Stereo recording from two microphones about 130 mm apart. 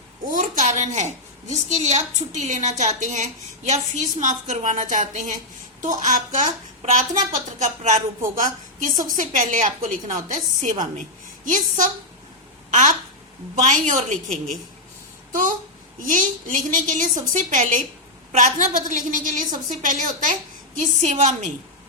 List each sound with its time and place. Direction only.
0.3 s a woman's voice: 80° right
8.4 s a woman's voice: 90° right
16.0 s a woman's voice: 80° right
20.7 s a woman's voice: 70° right (ahead or behind)